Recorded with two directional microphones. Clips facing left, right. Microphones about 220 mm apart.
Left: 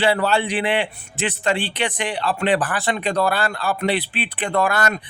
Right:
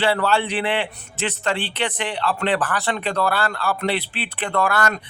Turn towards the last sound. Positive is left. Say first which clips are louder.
# left 1 dB
turn(degrees=15)  # may be behind; listen again after turning